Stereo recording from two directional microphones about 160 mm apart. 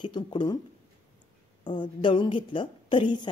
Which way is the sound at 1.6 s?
30° left (ahead or behind).